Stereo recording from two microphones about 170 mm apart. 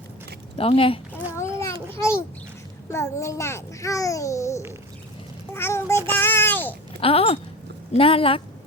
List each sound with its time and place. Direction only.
0.6 s a woman's voice: 35° left (ahead or behind)
1.4 s a sound: 15° left (ahead or behind)
2.9 s a child's voice: 15° left (ahead or behind)
5.5 s a sound: 15° left (ahead or behind)
6.1 s child singing: 15° left (ahead or behind)
7.0 s a woman's voice: 35° left (ahead or behind)